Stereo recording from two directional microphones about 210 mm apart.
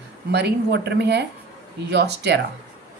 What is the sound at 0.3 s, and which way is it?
A woman's voice, 55° right (ahead or behind).